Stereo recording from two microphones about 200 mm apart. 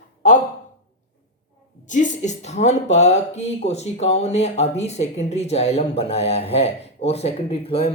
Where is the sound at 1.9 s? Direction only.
40° left (ahead or behind).